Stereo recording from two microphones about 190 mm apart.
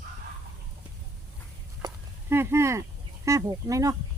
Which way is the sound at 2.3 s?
15° right (ahead or behind).